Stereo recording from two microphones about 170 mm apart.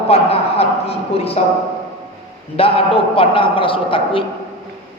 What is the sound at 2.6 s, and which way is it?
A man's voice, 35° left (ahead or behind).